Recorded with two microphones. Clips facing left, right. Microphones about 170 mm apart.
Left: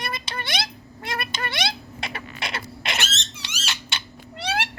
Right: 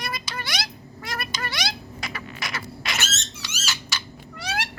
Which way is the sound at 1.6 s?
25° left (ahead or behind).